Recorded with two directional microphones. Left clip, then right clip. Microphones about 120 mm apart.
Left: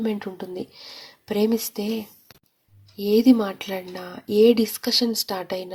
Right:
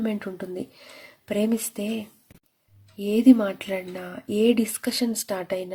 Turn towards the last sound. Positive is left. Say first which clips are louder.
# even
turn(degrees=45)  # may be behind; listen again after turning